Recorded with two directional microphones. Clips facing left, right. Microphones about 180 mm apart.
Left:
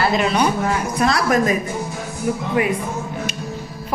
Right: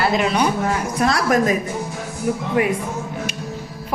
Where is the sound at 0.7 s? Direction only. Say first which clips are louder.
Even; 45° right (ahead or behind).